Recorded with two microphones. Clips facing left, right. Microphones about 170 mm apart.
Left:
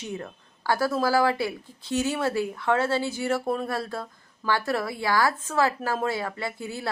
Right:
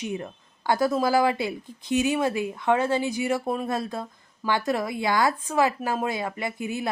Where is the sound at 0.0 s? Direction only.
15° right (ahead or behind).